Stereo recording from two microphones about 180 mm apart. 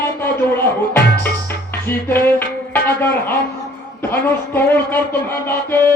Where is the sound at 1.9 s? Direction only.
10° left (ahead or behind).